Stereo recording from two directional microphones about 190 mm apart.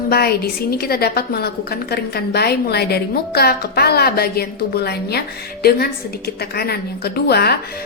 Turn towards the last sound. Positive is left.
turn(degrees=55)  # may be behind; listen again after turning